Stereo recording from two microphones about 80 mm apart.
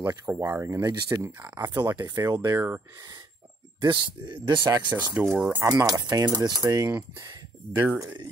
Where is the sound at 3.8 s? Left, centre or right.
Right.